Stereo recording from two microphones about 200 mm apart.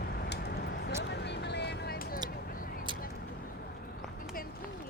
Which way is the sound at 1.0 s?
60° left (ahead or behind).